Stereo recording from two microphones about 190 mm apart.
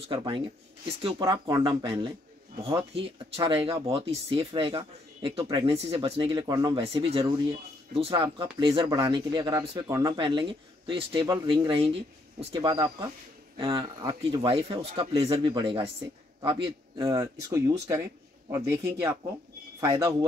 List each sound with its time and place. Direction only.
0.1 s speech: 25° right (ahead or behind)
5.8 s speech: 30° right (ahead or behind)